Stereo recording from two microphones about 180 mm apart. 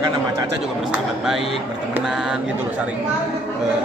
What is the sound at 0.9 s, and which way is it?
A man's voice, 5° right (ahead or behind).